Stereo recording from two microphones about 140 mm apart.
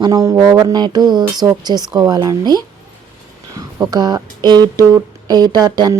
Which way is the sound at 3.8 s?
30° right (ahead or behind).